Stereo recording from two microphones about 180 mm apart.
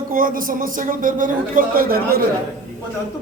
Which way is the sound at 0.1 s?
50° right (ahead or behind).